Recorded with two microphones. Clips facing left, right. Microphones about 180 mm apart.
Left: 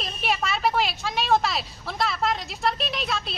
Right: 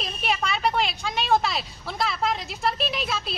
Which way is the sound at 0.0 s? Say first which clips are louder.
Even; centre (ahead or behind).